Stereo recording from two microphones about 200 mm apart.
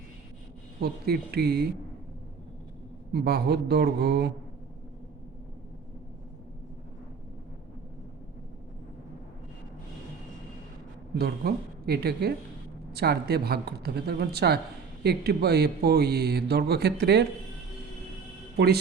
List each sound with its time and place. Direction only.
0.8 s speech: 50° right (ahead or behind)
3.1 s speech: 55° right (ahead or behind)
11.1 s a woman's voice: 55° right (ahead or behind)
18.5 s speech: 50° right (ahead or behind)